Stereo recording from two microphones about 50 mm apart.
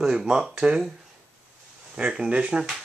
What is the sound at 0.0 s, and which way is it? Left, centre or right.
Speech, centre.